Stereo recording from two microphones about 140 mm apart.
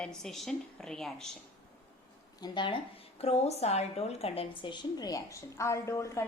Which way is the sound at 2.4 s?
35° left (ahead or behind).